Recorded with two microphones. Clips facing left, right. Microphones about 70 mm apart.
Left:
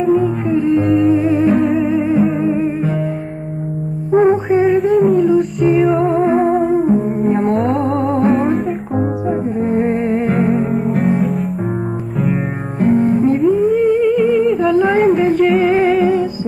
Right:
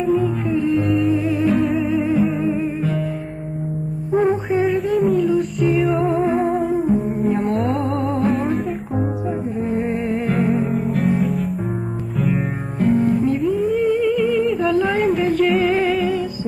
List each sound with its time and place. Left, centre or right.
0.0 s music: centre
0.7 s music: centre
1.1 s music: left
1.5 s music: centre
2.4 s music: left
4.1 s music: left
4.5 s music: centre
7.8 s music: centre
8.3 s music: centre
9.6 s music: left
10.7 s music: centre
12.8 s music: centre
14.3 s humming: centre
15.0 s music: centre